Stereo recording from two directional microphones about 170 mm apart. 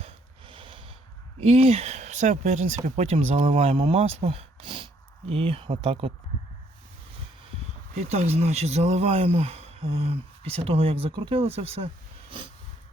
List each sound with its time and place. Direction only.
0.0 s snort: 30° right (ahead or behind)
1.4 s speech: 35° right (ahead or behind)
7.9 s speech: 45° right (ahead or behind)